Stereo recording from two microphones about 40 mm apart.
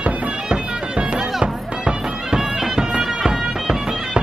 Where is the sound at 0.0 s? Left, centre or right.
Right.